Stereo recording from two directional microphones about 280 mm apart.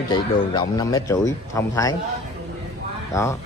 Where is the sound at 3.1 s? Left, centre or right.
Centre.